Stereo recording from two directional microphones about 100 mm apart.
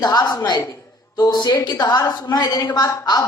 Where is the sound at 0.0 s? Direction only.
40° left (ahead or behind).